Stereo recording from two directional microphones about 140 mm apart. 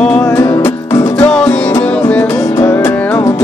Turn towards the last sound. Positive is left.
turn(degrees=20)  # may be behind; listen again after turning